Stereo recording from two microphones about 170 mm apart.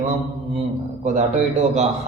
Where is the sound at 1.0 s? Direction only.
45° right (ahead or behind).